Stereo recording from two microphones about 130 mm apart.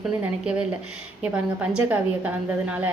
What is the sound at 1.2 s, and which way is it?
A woman's voice, 10° right (ahead or behind).